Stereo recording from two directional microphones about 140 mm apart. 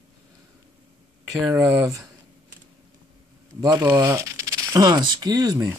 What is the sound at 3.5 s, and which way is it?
Speech, 25° right (ahead or behind).